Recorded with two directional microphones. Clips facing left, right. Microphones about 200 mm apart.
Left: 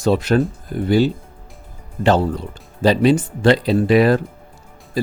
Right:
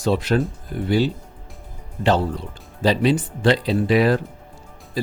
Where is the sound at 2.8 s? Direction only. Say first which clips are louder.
Left 4 dB; 45° left (ahead or behind).